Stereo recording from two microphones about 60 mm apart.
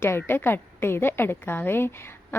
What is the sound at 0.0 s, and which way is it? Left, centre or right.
A woman's voice, left.